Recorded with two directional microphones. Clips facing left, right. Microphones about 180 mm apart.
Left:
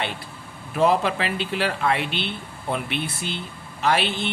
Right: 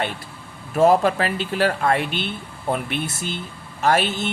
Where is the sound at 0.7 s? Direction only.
45° right (ahead or behind).